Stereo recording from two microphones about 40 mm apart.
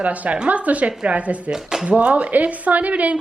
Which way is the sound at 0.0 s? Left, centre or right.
Right.